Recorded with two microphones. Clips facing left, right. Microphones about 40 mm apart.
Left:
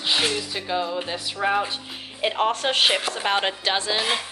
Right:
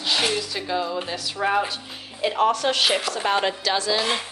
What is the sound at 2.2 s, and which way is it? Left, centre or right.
Speech, left.